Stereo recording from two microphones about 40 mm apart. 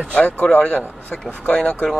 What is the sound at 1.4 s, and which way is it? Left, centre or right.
Speech, left.